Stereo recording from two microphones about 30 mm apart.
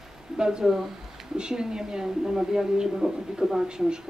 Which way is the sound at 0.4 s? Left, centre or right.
Right.